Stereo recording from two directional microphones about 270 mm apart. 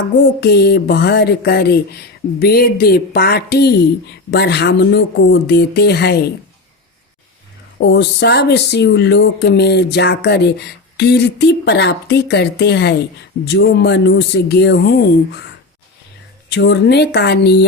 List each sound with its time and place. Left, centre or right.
0.3 s speech: left
7.8 s speech: left
16.5 s speech: left